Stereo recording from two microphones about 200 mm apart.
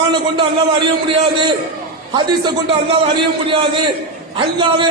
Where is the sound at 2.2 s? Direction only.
25° right (ahead or behind).